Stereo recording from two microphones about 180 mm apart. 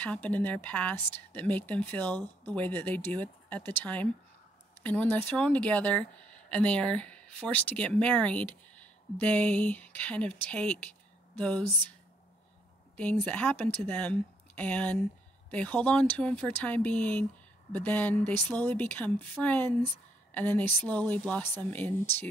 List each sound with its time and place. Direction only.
0.0 s a woman's voice: 10° left (ahead or behind)
12.9 s a woman's voice: 10° left (ahead or behind)